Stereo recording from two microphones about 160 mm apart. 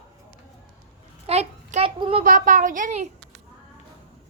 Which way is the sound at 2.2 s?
55° right (ahead or behind).